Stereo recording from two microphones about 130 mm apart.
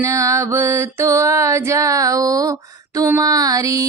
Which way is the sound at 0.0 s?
25° right (ahead or behind).